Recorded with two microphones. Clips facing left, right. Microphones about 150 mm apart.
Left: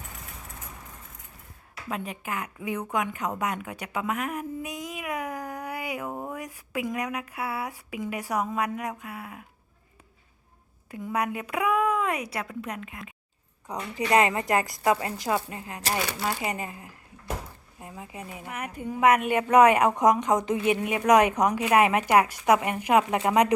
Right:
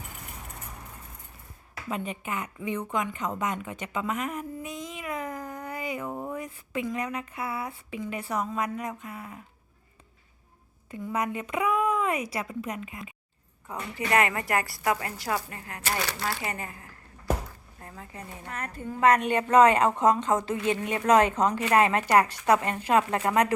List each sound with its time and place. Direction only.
1.9 s speech: 5° left (ahead or behind)
10.9 s a woman's voice: 5° left (ahead or behind)
13.7 s a woman's voice: 20° left (ahead or behind)